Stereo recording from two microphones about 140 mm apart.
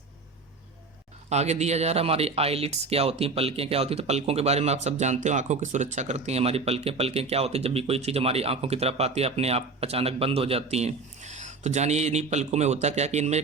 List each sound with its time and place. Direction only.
1.3 s speech: 50° right (ahead or behind)